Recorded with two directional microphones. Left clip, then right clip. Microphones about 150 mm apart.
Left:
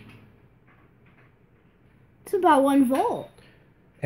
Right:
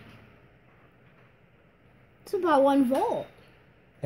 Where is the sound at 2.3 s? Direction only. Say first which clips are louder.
Left 3 dB; 35° left (ahead or behind).